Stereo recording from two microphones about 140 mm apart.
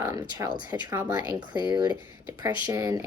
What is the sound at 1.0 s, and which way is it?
Speech, 30° right (ahead or behind).